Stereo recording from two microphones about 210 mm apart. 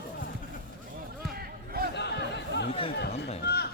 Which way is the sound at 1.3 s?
45° right (ahead or behind).